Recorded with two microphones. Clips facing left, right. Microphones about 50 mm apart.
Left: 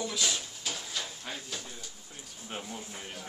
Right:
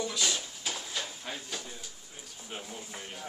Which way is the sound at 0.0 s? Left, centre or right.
Centre.